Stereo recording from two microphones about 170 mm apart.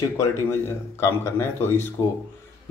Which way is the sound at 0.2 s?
15° left (ahead or behind).